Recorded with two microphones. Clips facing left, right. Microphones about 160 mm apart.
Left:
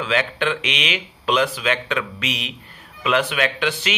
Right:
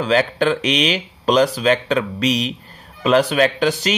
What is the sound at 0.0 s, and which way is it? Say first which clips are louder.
Speech: right 5 dB; 40° right (ahead or behind).